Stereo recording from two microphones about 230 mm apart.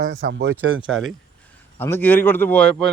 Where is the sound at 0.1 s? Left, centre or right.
Right.